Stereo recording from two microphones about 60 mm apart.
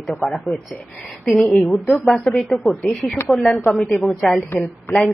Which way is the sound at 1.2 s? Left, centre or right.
Centre.